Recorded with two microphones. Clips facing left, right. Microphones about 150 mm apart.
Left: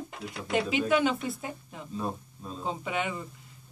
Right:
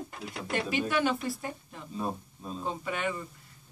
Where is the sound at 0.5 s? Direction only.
15° left (ahead or behind).